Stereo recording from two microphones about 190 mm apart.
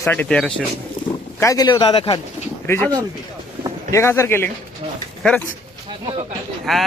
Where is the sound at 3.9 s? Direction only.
15° left (ahead or behind).